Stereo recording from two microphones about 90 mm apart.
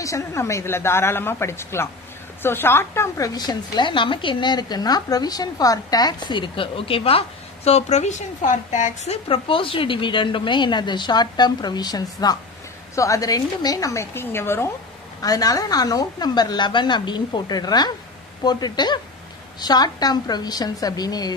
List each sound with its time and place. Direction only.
0.0 s speech: 35° left (ahead or behind)
3.3 s a woman's voice: 50° left (ahead or behind); by 7.2 s 90° left
9.3 s a woman's voice: 85° left; by 14.7 s 25° left (ahead or behind)
15.2 s speech: 45° left (ahead or behind)